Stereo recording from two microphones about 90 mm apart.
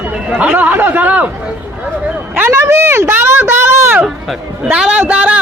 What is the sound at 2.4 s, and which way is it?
A man's voice, 30° right (ahead or behind).